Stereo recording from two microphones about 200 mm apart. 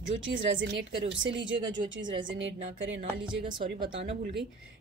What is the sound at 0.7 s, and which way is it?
A woman's voice, 60° right (ahead or behind).